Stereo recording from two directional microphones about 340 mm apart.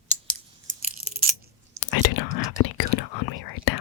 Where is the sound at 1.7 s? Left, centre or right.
Left.